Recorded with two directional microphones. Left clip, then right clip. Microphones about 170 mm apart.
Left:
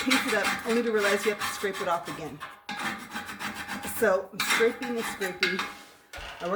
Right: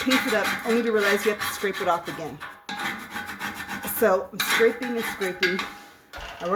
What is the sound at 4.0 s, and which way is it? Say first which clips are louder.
Speech: right 4 dB; 35° right (ahead or behind).